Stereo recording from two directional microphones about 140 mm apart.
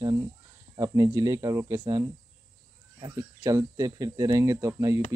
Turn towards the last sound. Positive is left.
turn(degrees=-20)  # may be behind; listen again after turning